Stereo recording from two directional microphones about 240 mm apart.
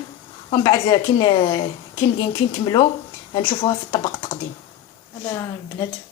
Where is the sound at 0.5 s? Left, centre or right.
Centre.